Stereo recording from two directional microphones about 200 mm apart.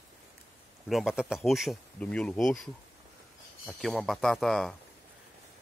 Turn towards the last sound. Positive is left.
turn(degrees=0)  # may be behind; listen again after turning